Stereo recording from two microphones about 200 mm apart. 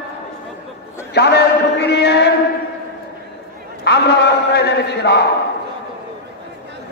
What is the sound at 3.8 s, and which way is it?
A man's voice, 60° left (ahead or behind).